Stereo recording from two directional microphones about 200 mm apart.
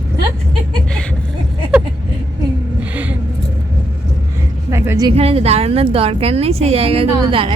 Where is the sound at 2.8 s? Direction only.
10° right (ahead or behind).